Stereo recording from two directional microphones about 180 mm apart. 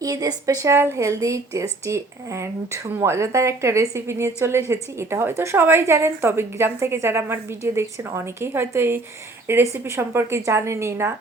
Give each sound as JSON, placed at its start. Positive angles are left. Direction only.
{"t": 0.0, "sound": "speech", "side_deg": -20}